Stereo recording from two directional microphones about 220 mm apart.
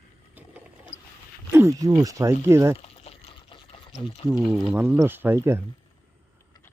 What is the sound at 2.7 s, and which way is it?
Pour, 25° left (ahead or behind).